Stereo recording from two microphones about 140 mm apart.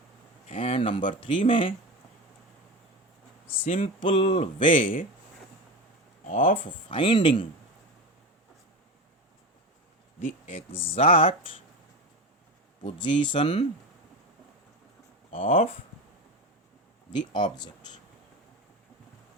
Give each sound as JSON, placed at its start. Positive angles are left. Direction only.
{"t": 0.4, "sound": "speech", "side_deg": 40}
{"t": 3.7, "sound": "speech", "side_deg": 40}
{"t": 4.8, "sound": "speech", "side_deg": 75}
{"t": 6.2, "sound": "speech", "side_deg": 75}
{"t": 6.6, "sound": "speech", "side_deg": 35}
{"t": 10.2, "sound": "speech", "side_deg": 45}
{"t": 12.8, "sound": "speech", "side_deg": 35}
{"t": 15.3, "sound": "speech", "side_deg": 45}
{"t": 17.1, "sound": "speech", "side_deg": 30}